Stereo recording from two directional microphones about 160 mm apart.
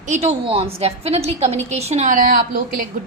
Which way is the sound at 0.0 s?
45° right (ahead or behind).